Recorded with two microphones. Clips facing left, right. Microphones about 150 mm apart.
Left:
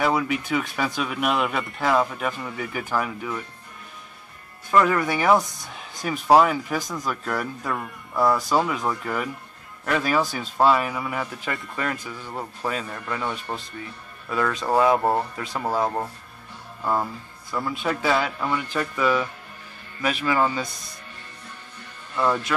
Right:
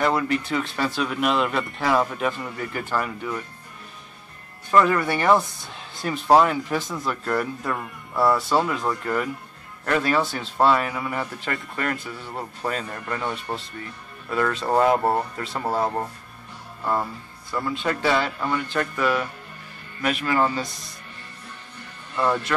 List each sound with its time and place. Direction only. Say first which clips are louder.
0.0 s speech: right 1 dB; 5° left (ahead or behind)
4.7 s speech: right 1 dB; centre (ahead or behind)
5.4 s speech: right 1 dB; 20° left (ahead or behind)
6.2 s speech: even; 5° left (ahead or behind)
22.1 s speech: even; centre (ahead or behind)